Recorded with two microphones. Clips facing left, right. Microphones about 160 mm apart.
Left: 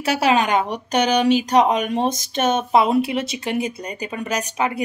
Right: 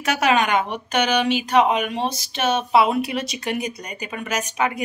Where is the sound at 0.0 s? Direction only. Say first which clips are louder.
Left 1 dB; 30° left (ahead or behind).